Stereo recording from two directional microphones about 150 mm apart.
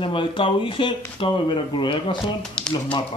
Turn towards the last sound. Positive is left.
turn(degrees=35)  # may be behind; listen again after turning